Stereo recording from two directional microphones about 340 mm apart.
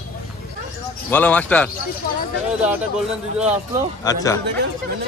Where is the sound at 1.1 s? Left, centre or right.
Centre.